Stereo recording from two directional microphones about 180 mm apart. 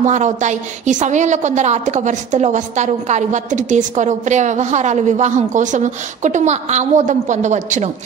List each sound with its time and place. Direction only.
0.0 s a woman's voice: 40° right (ahead or behind)